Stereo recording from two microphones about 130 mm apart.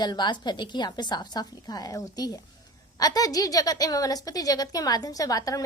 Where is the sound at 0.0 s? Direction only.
35° left (ahead or behind).